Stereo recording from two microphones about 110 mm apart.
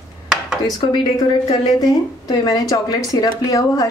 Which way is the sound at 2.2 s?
35° left (ahead or behind).